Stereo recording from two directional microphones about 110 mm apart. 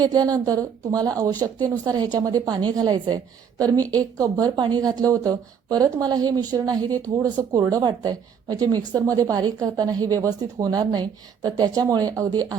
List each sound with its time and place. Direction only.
0.0 s speech: 35° right (ahead or behind)